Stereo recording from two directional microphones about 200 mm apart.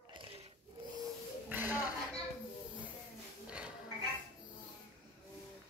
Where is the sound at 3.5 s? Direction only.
5° right (ahead or behind).